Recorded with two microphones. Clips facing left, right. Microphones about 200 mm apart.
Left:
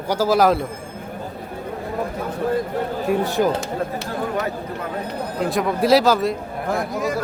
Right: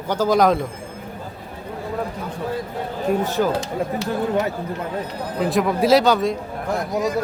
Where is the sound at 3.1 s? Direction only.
15° left (ahead or behind).